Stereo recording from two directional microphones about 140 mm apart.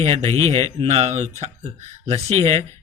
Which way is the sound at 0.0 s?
45° right (ahead or behind).